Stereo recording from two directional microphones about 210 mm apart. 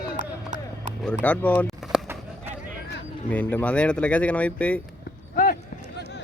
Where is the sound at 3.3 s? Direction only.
5° left (ahead or behind).